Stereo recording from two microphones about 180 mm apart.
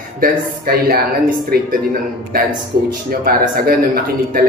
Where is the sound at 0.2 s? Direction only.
55° right (ahead or behind).